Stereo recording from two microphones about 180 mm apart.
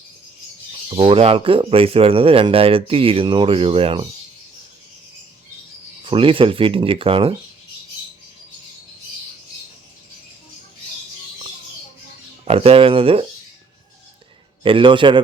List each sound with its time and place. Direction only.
0.9 s speech: 30° right (ahead or behind)
6.1 s speech: 30° right (ahead or behind)
12.5 s a sound: 30° right (ahead or behind)
14.6 s speech: 30° right (ahead or behind)